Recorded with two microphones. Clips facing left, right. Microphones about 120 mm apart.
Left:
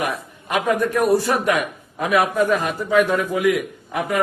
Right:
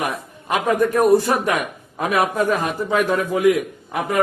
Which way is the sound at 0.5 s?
35° right (ahead or behind).